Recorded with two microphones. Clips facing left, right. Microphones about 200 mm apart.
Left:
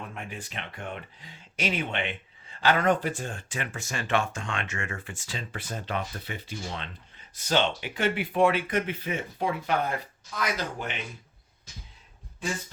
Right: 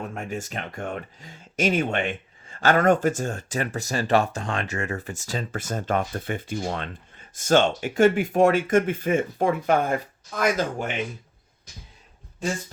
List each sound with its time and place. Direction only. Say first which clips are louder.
0.0 s speech: right 7 dB; 45° right (ahead or behind)